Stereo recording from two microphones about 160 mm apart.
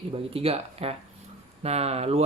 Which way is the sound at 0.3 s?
40° right (ahead or behind).